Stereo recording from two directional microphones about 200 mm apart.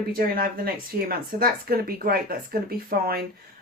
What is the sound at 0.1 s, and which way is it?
A woman's voice, 45° right (ahead or behind).